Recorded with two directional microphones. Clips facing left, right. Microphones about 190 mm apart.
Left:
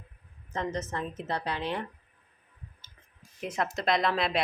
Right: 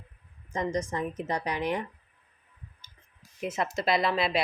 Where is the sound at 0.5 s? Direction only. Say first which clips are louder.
Right 3 dB; 15° right (ahead or behind).